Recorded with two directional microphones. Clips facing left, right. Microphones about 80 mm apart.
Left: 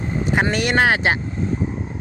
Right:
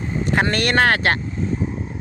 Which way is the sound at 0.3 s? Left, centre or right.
Centre.